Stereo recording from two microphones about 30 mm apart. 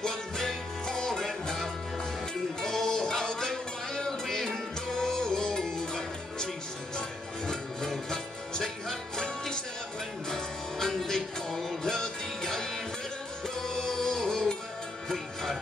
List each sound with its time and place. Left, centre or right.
0.0 s music: centre
2.6 s music: centre
10.3 s music: centre
14.0 s music: left